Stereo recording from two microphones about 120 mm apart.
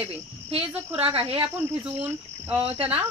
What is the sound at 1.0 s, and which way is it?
Speech, 50° right (ahead or behind).